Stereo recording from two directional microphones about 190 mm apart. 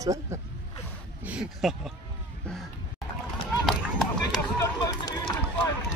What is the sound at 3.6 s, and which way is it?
Run, centre (ahead or behind).